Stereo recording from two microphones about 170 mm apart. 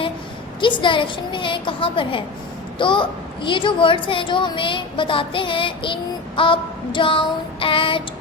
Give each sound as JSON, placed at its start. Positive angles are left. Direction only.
{"t": 0.6, "sound": "a woman's voice", "side_deg": 30}